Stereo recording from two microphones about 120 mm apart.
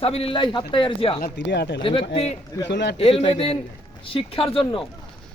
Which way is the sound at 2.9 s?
55° left (ahead or behind).